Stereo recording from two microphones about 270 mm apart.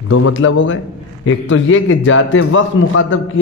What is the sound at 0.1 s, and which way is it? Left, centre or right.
Speech, left.